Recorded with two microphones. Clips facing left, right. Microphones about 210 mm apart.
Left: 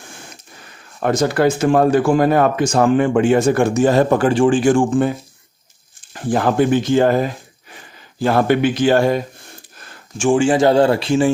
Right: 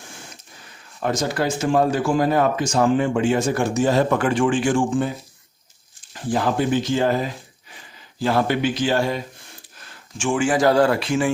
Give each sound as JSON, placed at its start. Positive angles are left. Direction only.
{"t": 0.9, "sound": "speech", "side_deg": 55}
{"t": 4.1, "sound": "speech", "side_deg": 35}
{"t": 6.1, "sound": "speech", "side_deg": 55}
{"t": 10.2, "sound": "speech", "side_deg": 35}